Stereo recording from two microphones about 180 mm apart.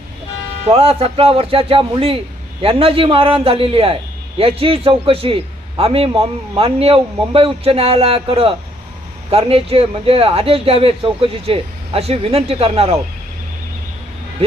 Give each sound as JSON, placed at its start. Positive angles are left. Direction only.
{"t": 0.7, "sound": "speech", "side_deg": -35}